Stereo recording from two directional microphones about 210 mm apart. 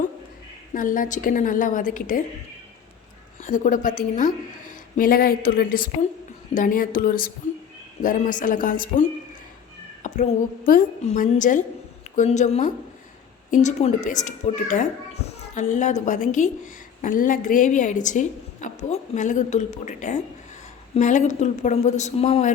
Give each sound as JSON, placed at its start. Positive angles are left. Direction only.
{"t": 0.7, "sound": "a woman's voice", "side_deg": 40}
{"t": 3.4, "sound": "a woman's voice", "side_deg": 35}
{"t": 10.0, "sound": "a sound", "side_deg": 35}
{"t": 10.7, "sound": "a woman's voice", "side_deg": 40}